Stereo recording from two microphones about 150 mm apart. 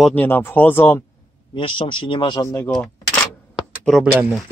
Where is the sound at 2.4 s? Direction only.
15° left (ahead or behind).